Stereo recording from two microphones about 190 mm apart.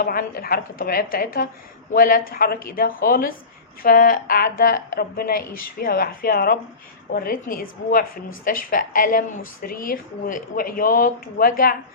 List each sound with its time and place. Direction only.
0.0 s speech: 50° left (ahead or behind)